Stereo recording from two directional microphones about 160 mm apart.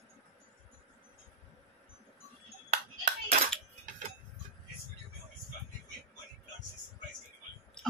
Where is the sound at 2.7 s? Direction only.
50° right (ahead or behind).